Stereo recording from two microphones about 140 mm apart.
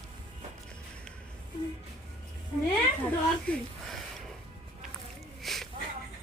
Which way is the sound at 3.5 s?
10° left (ahead or behind).